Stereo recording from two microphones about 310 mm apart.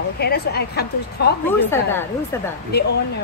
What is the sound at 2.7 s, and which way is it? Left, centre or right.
Speech, left.